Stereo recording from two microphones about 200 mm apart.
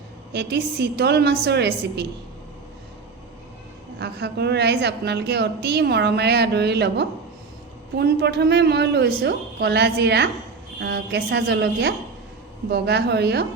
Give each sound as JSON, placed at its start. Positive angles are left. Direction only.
{"t": 0.3, "sound": "a woman's voice", "side_deg": -55}
{"t": 3.9, "sound": "a woman's voice", "side_deg": -55}